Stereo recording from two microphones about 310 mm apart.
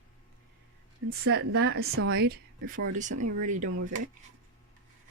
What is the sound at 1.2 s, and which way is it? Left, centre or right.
Speech, right.